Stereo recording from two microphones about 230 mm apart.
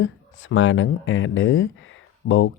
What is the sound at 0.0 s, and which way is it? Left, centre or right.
Speech, left.